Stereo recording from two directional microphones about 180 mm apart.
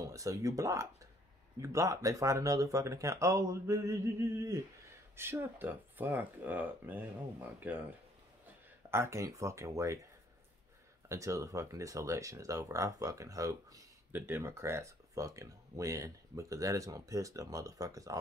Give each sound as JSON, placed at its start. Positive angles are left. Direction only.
{"t": 0.0, "sound": "speech", "side_deg": -20}
{"t": 8.9, "sound": "speech", "side_deg": -15}
{"t": 11.1, "sound": "speech", "side_deg": -15}